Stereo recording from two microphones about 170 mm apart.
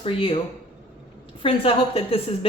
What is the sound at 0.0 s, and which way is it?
Speech, 35° left (ahead or behind).